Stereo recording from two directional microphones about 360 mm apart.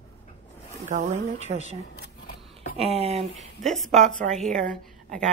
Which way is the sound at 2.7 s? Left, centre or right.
Centre.